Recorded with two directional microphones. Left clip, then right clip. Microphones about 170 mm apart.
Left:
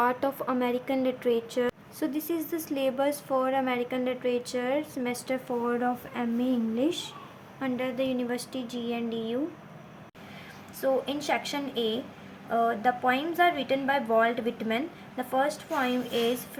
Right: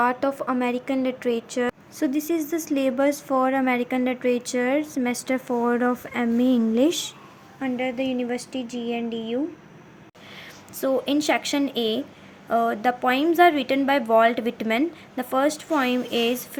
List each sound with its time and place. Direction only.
0.0 s a woman's voice: 15° right (ahead or behind); by 7.1 s 40° right (ahead or behind)
7.6 s a woman's voice: 5° right (ahead or behind)
10.8 s a woman's voice: 55° right (ahead or behind)